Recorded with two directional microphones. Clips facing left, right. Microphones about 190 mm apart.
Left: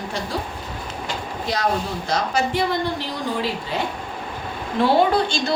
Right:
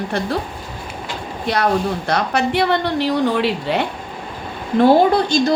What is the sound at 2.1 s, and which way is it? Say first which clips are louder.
A woman's voice: right 1 dB; 65° right (ahead or behind).